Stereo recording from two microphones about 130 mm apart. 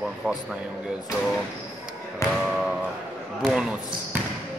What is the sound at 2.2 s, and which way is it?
Speech, 25° left (ahead or behind).